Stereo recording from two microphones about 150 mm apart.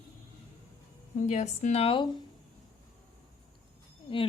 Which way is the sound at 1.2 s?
55° left (ahead or behind).